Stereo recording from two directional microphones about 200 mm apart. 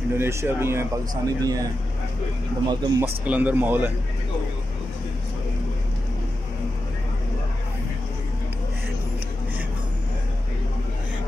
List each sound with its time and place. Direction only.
0.1 s speech: 15° right (ahead or behind)
2.7 s speech: 20° right (ahead or behind)
3.3 s speech: 5° right (ahead or behind)